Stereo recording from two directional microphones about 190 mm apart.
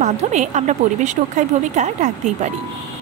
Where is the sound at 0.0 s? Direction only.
40° right (ahead or behind).